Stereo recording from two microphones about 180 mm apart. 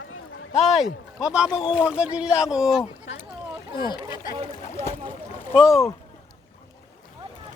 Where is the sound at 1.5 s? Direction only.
25° left (ahead or behind).